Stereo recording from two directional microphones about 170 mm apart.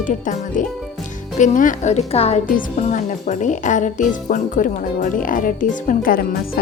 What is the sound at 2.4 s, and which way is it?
Speech, 50° left (ahead or behind).